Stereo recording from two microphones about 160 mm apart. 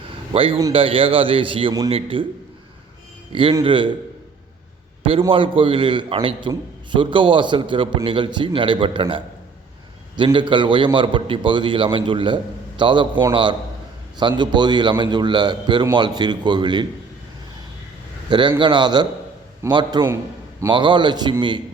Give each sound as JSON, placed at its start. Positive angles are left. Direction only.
{"t": 0.3, "sound": "a man's voice", "side_deg": -35}
{"t": 3.6, "sound": "a man's voice", "side_deg": -30}
{"t": 5.3, "sound": "a man's voice", "side_deg": -35}
{"t": 18.3, "sound": "a man's voice", "side_deg": -30}